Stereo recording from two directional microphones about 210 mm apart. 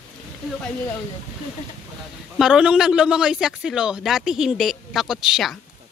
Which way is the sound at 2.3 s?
5° right (ahead or behind).